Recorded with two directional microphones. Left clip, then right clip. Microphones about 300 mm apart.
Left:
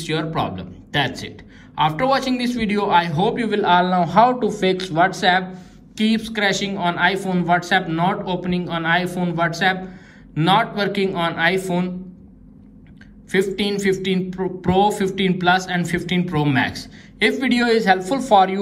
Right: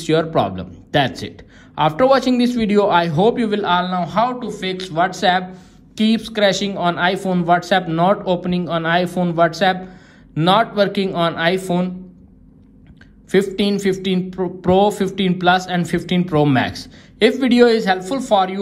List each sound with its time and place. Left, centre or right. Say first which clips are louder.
0.0 s a man's voice: right 6 dB; centre
13.3 s a man's voice: right 3 dB; centre